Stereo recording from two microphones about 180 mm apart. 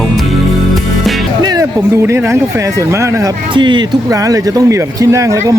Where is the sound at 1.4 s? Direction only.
20° right (ahead or behind).